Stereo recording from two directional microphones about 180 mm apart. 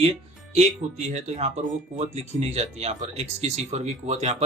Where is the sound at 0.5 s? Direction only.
35° right (ahead or behind).